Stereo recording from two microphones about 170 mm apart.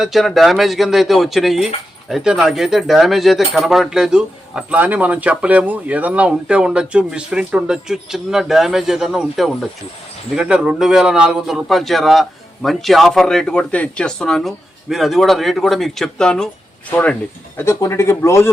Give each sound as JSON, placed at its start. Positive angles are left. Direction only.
{"t": 0.0, "sound": "speech", "side_deg": 0}